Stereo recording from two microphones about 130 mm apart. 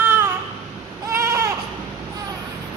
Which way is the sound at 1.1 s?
20° right (ahead or behind).